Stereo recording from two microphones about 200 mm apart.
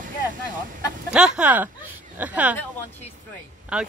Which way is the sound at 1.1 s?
5° right (ahead or behind).